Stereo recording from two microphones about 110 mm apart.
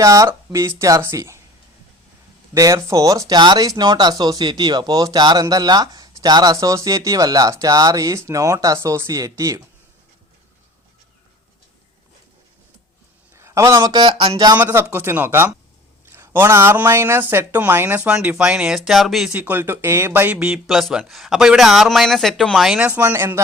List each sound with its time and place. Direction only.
0.0 s speech: 30° right (ahead or behind)
2.6 s speech: 30° right (ahead or behind)
13.3 s a sound: 25° right (ahead or behind)
13.9 s a sound: 50° right (ahead or behind)
14.6 s speech: 20° right (ahead or behind); by 19.3 s centre (ahead or behind)
19.3 s speech: 15° right (ahead or behind)